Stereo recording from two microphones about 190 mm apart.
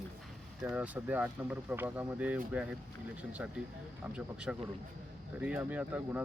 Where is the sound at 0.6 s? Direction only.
10° right (ahead or behind).